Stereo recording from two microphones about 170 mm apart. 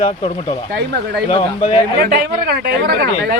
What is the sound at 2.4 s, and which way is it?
Speech, 60° right (ahead or behind).